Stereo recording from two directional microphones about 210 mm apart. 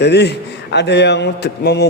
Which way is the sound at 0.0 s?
55° left (ahead or behind).